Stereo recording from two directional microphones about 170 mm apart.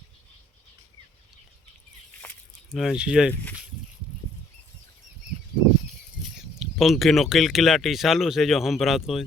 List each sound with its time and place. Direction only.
2.7 s speech: centre (ahead or behind)
6.6 s speech: centre (ahead or behind)